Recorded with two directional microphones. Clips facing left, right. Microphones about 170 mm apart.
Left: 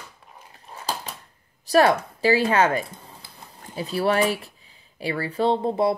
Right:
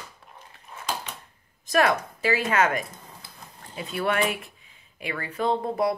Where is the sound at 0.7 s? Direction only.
35° left (ahead or behind).